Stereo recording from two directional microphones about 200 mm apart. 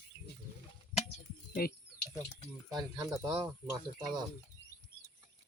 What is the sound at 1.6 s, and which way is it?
Speech, 50° left (ahead or behind).